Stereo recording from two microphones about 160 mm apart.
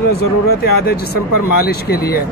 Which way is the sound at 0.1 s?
75° left (ahead or behind).